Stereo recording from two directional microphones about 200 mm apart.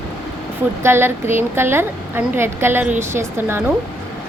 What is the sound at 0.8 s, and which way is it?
A woman's voice, 10° right (ahead or behind).